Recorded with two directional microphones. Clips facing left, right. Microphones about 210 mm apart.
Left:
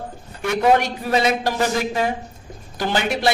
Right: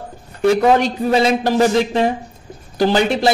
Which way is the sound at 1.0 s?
25° right (ahead or behind).